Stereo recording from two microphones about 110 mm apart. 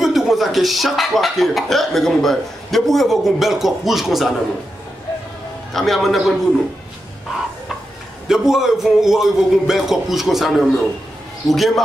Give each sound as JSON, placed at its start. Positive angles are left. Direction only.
{"t": 0.0, "sound": "speech", "side_deg": 0}
{"t": 5.7, "sound": "speech", "side_deg": 0}
{"t": 8.3, "sound": "speech", "side_deg": -5}